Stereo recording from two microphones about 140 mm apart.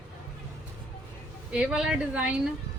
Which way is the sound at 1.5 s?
5° right (ahead or behind).